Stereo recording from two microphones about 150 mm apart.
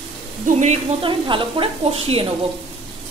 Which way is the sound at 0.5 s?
50° right (ahead or behind).